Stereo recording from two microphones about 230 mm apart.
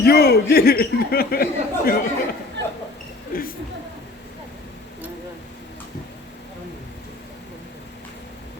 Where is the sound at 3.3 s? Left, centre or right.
Left.